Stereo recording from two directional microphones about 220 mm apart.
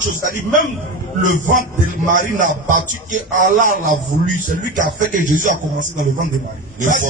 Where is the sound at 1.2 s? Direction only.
35° right (ahead or behind).